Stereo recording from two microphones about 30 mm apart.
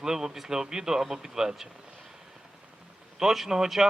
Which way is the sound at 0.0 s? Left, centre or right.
Centre.